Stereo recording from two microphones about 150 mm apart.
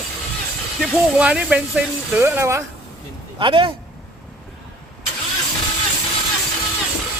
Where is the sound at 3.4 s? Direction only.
35° right (ahead or behind).